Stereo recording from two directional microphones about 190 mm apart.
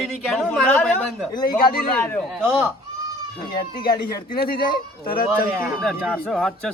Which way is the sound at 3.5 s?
55° left (ahead or behind).